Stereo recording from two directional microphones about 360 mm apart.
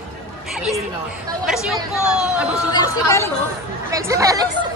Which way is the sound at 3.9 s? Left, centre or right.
Centre.